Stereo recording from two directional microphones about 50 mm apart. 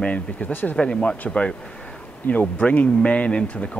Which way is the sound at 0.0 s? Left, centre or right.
Left.